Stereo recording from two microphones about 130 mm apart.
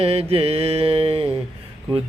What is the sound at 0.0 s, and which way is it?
Mantra, 50° right (ahead or behind).